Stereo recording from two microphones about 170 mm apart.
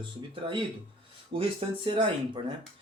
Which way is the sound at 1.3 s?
30° right (ahead or behind).